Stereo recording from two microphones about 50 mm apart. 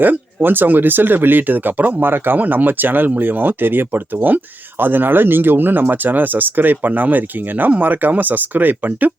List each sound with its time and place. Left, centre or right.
0.0 s speech: right